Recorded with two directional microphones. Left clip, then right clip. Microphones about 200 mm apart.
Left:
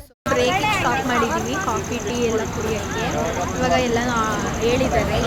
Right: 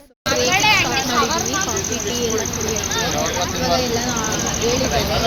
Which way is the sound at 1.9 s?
35° left (ahead or behind).